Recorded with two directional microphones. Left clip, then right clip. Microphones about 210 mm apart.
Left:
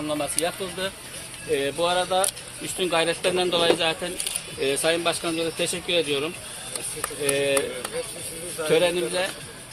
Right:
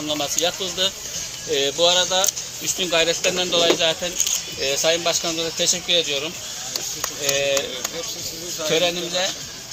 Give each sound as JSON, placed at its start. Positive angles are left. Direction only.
{"t": 0.1, "sound": "speech", "side_deg": 5}
{"t": 1.5, "sound": "speech", "side_deg": 20}
{"t": 8.7, "sound": "speech", "side_deg": 45}